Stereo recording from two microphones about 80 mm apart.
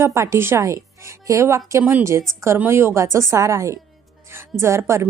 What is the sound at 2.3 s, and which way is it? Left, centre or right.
Speech, right.